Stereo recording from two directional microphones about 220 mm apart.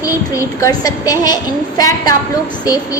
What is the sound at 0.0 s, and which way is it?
A woman's voice, 15° left (ahead or behind).